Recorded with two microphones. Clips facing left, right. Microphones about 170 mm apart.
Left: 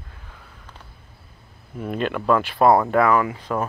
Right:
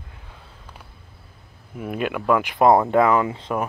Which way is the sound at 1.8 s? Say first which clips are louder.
Left 1 dB; 10° right (ahead or behind).